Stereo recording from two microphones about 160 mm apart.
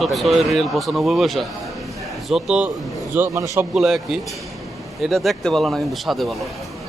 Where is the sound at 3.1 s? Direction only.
15° right (ahead or behind).